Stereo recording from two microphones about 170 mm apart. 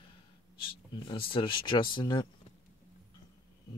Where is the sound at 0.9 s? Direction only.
30° left (ahead or behind).